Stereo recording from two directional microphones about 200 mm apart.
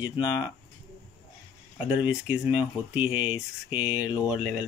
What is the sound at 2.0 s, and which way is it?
Speech, 10° right (ahead or behind).